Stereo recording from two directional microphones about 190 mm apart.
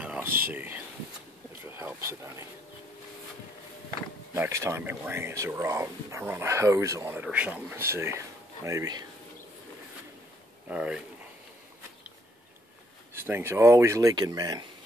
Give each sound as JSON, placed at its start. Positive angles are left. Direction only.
{"t": 0.0, "sound": "a sound", "side_deg": -5}
{"t": 0.4, "sound": "speech", "side_deg": -10}
{"t": 4.3, "sound": "speech", "side_deg": -15}
{"t": 10.7, "sound": "speech", "side_deg": -5}
{"t": 13.1, "sound": "speech", "side_deg": -10}